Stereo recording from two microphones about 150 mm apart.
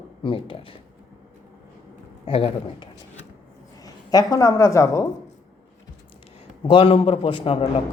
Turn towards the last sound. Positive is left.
turn(degrees=40)  # may be behind; listen again after turning